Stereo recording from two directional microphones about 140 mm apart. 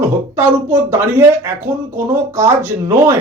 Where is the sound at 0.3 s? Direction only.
15° right (ahead or behind).